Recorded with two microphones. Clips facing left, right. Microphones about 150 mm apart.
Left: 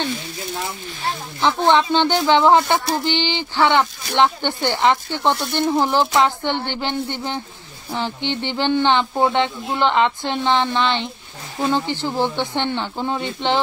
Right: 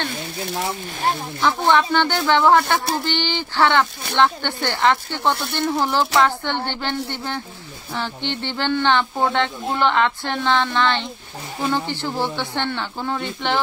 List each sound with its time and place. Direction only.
1.4 s speech: 20° left (ahead or behind)